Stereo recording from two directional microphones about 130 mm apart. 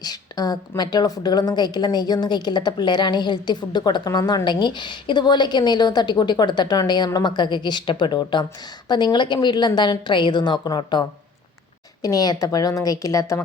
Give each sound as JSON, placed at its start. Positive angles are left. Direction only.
{"t": 0.0, "sound": "a sound", "side_deg": 30}
{"t": 0.8, "sound": "a woman's voice", "side_deg": 30}
{"t": 12.0, "sound": "a woman's voice", "side_deg": 30}